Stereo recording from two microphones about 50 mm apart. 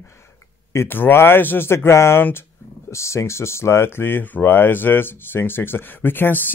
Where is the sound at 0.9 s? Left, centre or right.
Left.